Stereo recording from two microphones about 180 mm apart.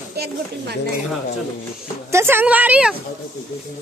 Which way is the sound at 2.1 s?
15° right (ahead or behind).